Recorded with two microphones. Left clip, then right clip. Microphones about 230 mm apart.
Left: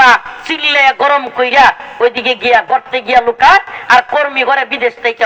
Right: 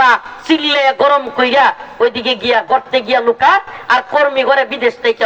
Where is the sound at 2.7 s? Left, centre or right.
Right.